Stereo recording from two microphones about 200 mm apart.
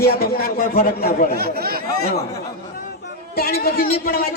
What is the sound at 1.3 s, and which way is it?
Speech, 50° right (ahead or behind).